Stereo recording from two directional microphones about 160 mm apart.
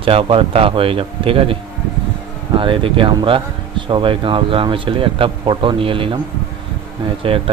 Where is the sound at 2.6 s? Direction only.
30° right (ahead or behind).